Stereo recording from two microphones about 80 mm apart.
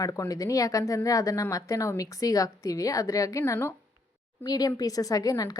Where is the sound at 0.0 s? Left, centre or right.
Left.